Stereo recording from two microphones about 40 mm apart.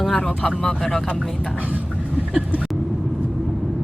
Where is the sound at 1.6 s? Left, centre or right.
Right.